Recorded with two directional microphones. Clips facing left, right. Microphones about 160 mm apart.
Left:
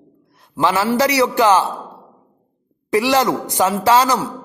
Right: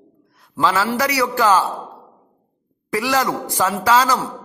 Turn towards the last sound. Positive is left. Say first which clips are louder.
# left 2 dB
turn(degrees=25)  # may be behind; listen again after turning